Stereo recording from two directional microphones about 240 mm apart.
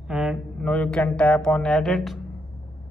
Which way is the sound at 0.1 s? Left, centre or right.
Centre.